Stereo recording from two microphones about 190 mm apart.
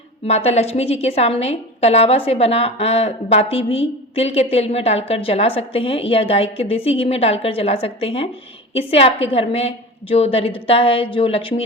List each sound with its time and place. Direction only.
0.3 s a woman's voice: 35° left (ahead or behind)